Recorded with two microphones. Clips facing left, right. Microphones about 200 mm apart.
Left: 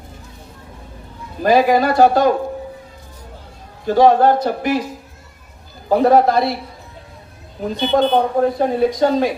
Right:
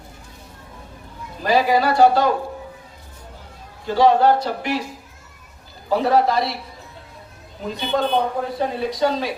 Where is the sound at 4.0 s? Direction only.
50° left (ahead or behind).